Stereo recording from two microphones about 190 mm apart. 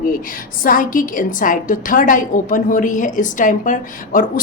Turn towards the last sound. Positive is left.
turn(degrees=45)  # may be behind; listen again after turning